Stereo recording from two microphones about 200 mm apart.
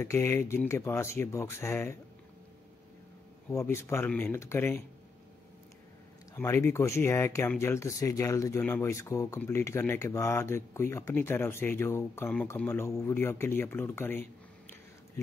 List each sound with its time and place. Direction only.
0.0 s speech: 15° left (ahead or behind)
3.4 s speech: 10° left (ahead or behind)
6.3 s speech: 10° left (ahead or behind)